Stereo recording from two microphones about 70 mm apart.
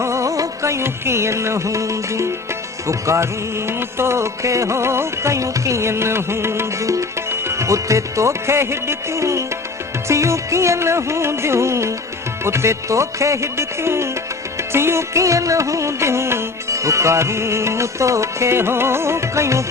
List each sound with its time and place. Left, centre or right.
0.0 s music: right